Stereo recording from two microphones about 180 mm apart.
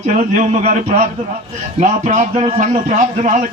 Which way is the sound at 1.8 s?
45° right (ahead or behind).